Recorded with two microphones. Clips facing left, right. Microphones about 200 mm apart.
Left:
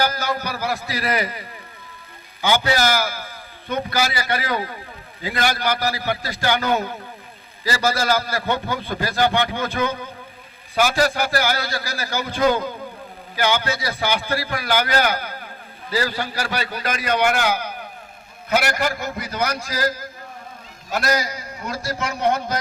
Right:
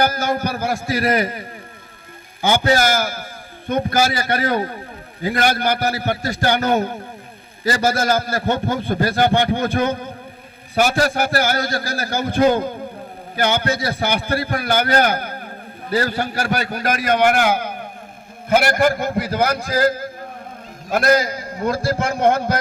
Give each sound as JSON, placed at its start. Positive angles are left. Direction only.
{"t": 0.0, "sound": "a man's voice", "side_deg": -50}
{"t": 2.6, "sound": "a man's voice", "side_deg": -50}
{"t": 11.1, "sound": "a man's voice", "side_deg": -50}
{"t": 13.4, "sound": "a man's voice", "side_deg": -55}